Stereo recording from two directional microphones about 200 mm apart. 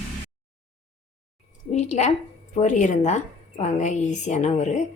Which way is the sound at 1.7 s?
35° left (ahead or behind).